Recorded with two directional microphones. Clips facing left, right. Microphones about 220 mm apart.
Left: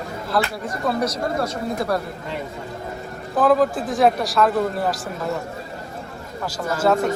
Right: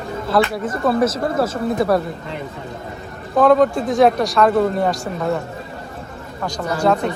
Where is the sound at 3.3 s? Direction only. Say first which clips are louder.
Right 4 dB; centre (ahead or behind).